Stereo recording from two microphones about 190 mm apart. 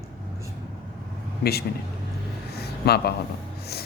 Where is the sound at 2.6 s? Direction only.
55° left (ahead or behind).